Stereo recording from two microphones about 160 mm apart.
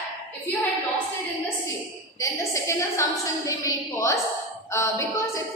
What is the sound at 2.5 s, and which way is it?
A woman's voice, 20° left (ahead or behind).